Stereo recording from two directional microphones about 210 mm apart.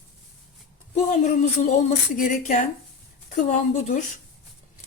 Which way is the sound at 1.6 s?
35° left (ahead or behind).